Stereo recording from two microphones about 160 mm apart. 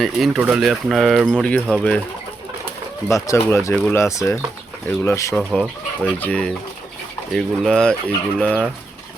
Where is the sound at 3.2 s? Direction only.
20° left (ahead or behind).